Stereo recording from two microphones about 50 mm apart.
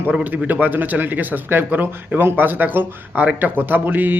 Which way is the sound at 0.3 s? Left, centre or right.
Right.